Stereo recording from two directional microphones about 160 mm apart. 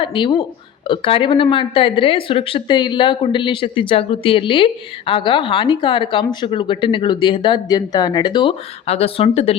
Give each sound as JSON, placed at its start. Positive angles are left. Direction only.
{"t": 0.0, "sound": "speech", "side_deg": 30}